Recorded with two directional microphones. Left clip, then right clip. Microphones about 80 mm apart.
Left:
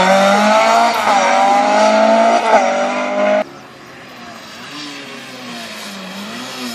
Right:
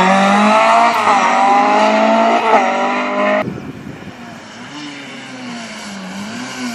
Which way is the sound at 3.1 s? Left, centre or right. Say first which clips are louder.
Left 3 dB; left.